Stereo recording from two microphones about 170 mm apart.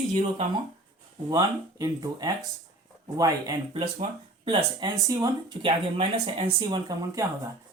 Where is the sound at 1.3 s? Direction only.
20° right (ahead or behind).